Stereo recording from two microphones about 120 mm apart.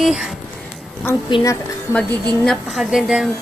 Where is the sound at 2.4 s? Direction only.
Centre (ahead or behind).